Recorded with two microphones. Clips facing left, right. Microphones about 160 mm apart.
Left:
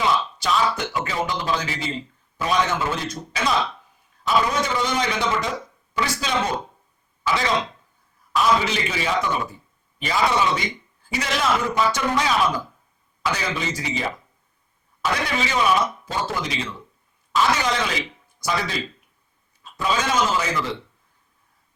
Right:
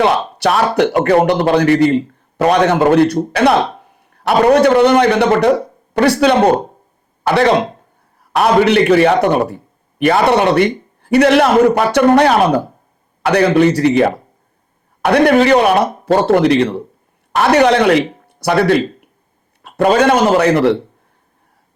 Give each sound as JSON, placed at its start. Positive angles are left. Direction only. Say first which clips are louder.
{"t": 0.0, "sound": "a man's voice", "louder": "right 9 dB", "side_deg": -55}